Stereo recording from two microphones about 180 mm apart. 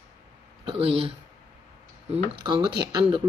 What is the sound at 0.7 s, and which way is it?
Speech, 30° right (ahead or behind).